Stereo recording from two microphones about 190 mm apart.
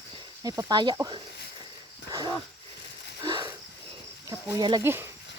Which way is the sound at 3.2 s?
25° right (ahead or behind).